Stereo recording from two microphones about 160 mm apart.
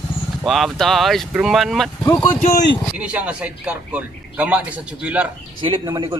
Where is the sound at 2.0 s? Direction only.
25° left (ahead or behind).